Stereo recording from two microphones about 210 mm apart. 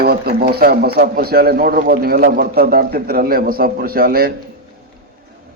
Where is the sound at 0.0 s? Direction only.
45° right (ahead or behind).